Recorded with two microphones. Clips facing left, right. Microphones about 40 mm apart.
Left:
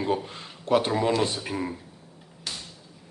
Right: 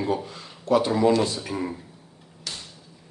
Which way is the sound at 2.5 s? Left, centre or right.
Centre.